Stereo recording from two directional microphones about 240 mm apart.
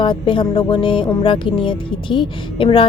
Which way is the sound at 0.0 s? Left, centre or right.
Centre.